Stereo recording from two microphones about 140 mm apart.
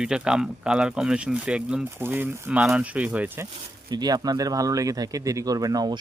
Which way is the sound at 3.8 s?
30° right (ahead or behind).